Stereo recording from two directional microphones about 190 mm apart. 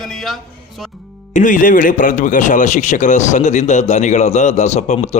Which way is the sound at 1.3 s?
45° left (ahead or behind).